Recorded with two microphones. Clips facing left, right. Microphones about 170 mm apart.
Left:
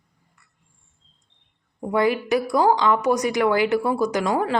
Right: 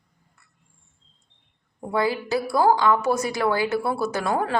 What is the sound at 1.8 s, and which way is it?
A woman's voice, 15° left (ahead or behind).